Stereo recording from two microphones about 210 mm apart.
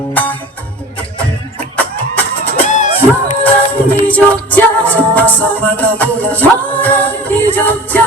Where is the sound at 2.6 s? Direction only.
35° left (ahead or behind).